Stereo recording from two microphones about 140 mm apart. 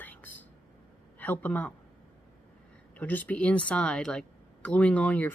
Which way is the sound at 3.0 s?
10° left (ahead or behind).